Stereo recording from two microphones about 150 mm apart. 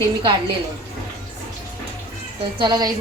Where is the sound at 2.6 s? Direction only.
30° right (ahead or behind).